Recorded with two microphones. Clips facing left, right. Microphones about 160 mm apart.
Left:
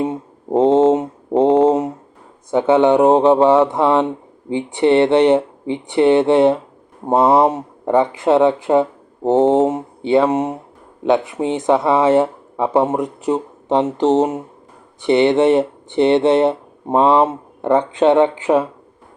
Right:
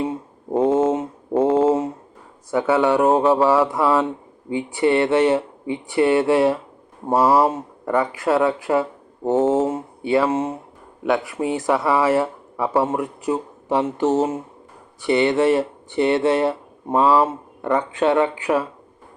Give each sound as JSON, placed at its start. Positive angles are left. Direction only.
{"t": 0.0, "sound": "mantra", "side_deg": 20}
{"t": 2.5, "sound": "speech", "side_deg": 20}